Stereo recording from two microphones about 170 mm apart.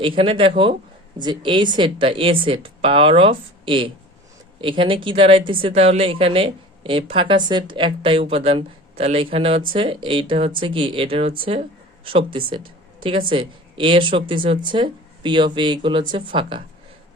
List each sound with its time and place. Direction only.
0.0 s a woman's voice: 30° right (ahead or behind)